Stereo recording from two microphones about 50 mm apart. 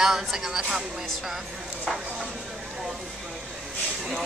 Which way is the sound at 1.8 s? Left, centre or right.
Centre.